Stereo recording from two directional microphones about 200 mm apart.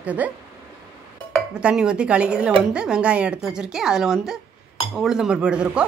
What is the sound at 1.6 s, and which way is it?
Speech, 5° right (ahead or behind).